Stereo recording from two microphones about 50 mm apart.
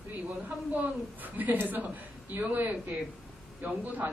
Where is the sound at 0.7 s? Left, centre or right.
Right.